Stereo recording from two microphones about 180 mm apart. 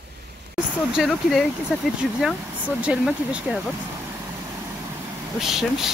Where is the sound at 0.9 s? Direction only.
Centre (ahead or behind).